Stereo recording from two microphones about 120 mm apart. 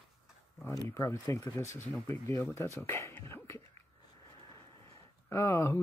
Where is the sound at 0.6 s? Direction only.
25° left (ahead or behind).